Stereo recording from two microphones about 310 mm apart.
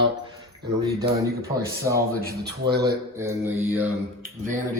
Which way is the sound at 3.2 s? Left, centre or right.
Centre.